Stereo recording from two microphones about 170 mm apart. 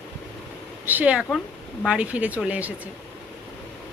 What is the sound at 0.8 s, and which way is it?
A woman's voice, 10° right (ahead or behind).